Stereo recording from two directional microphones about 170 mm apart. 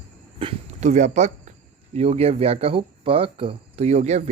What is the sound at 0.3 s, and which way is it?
Speech, 35° right (ahead or behind).